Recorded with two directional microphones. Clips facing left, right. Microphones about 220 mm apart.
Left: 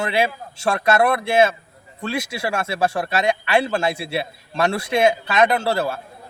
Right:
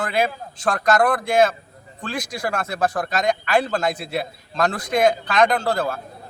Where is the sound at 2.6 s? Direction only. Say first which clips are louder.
Left 2 dB; 25° left (ahead or behind).